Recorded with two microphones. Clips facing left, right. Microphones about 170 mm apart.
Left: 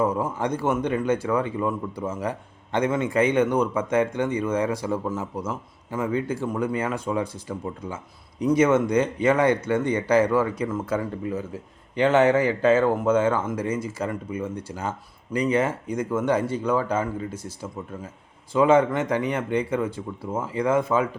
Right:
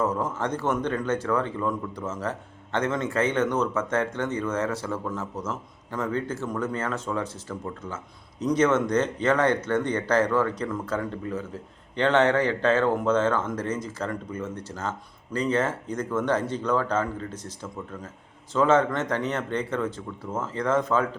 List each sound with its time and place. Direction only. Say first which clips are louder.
0.0 s a man's voice: left 2 dB; 10° left (ahead or behind)